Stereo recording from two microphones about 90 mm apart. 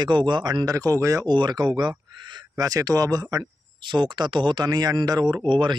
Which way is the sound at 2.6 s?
45° right (ahead or behind).